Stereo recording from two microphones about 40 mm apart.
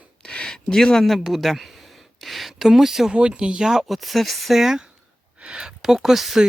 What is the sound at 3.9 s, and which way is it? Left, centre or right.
Speech, centre.